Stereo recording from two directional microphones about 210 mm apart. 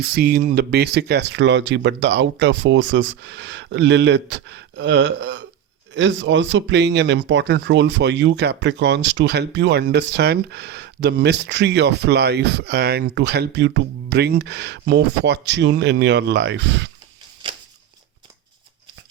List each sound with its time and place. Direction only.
0.0 s speech: 45° right (ahead or behind)